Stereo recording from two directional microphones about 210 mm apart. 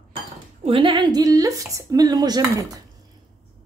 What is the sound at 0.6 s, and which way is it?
A woman's voice, 25° right (ahead or behind).